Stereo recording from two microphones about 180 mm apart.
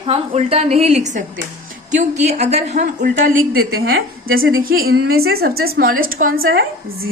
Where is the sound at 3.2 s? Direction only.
55° right (ahead or behind); by 4.6 s 75° right (ahead or behind).